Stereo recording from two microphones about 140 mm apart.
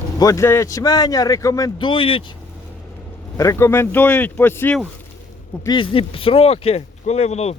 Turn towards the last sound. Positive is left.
turn(degrees=50)  # may be behind; listen again after turning